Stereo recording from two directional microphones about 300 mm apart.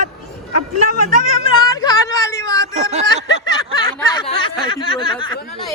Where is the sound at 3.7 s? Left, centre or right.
Centre.